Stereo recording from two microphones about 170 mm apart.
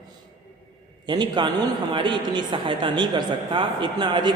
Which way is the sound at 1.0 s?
25° right (ahead or behind).